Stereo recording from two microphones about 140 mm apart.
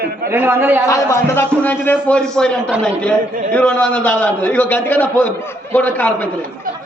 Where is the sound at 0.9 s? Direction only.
20° left (ahead or behind).